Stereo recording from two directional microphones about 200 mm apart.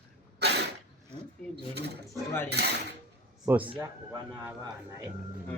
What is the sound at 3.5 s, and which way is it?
A man's voice, 10° right (ahead or behind).